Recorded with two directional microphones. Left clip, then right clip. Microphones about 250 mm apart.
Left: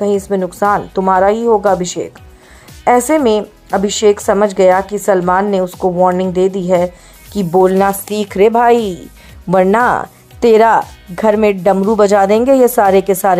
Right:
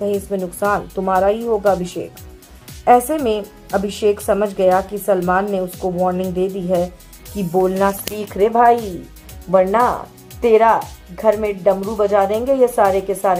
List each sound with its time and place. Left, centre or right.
0.0 s speech: left